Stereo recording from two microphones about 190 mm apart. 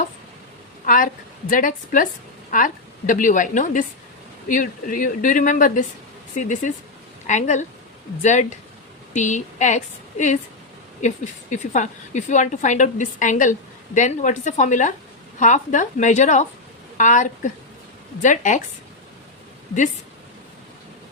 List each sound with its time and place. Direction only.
0.9 s a woman's voice: 45° left (ahead or behind)